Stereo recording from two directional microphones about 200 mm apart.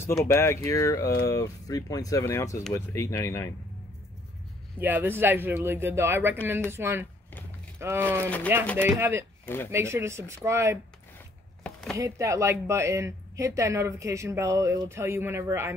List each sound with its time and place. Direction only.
0.0 s speech: 10° left (ahead or behind)
4.7 s speech: 10° right (ahead or behind)
11.6 s a sound: centre (ahead or behind)
12.0 s speech: 15° right (ahead or behind)